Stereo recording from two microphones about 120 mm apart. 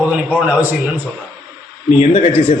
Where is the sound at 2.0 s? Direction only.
60° left (ahead or behind).